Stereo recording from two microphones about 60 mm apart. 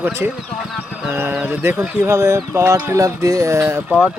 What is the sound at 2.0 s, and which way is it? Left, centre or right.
Speech, right.